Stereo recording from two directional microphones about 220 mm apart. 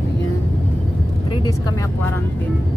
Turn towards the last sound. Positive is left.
turn(degrees=15)  # may be behind; listen again after turning